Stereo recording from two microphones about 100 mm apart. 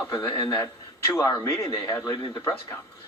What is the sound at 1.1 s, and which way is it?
Speech, 30° left (ahead or behind).